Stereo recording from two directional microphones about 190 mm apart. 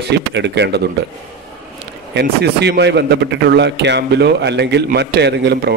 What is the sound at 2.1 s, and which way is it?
A man's voice, 60° right (ahead or behind).